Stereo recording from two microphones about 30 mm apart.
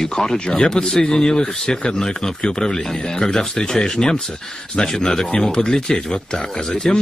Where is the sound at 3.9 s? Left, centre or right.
Centre.